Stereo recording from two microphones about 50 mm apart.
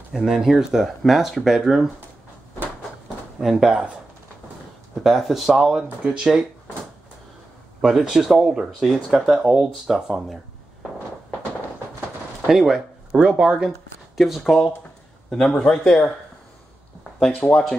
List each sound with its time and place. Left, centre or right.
0.1 s speech: centre
3.3 s speech: centre
5.0 s speech: centre
7.8 s speech: centre
12.4 s speech: centre
13.1 s speech: centre
13.7 s speech: centre
17.5 s speech: centre